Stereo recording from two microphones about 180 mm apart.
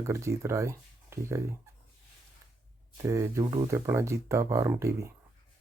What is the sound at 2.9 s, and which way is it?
Speech, 15° right (ahead or behind).